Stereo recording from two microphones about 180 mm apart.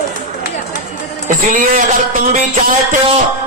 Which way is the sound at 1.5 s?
45° right (ahead or behind).